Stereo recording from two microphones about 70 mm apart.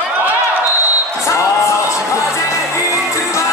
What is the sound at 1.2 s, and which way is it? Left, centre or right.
Music, left.